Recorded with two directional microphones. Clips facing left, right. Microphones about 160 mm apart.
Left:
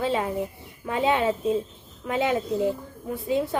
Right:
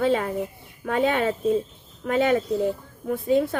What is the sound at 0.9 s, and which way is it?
Speech, 60° right (ahead or behind).